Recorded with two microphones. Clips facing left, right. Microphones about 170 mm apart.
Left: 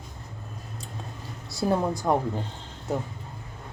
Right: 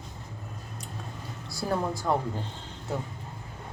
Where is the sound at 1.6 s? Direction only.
20° left (ahead or behind).